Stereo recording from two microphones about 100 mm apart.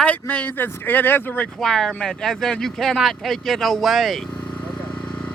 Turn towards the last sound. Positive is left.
turn(degrees=0)  # may be behind; listen again after turning